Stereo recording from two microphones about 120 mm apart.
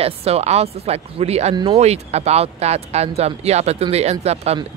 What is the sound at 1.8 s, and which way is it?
Speech, 65° right (ahead or behind).